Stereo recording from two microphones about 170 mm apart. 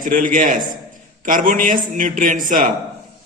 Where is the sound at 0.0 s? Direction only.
50° right (ahead or behind).